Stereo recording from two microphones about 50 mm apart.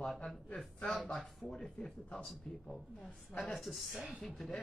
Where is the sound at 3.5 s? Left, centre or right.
Centre.